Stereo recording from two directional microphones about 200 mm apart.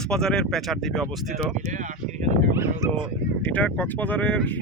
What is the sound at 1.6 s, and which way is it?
Speech, 40° right (ahead or behind).